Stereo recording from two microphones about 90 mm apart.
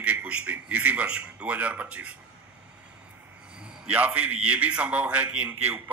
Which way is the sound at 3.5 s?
10° right (ahead or behind).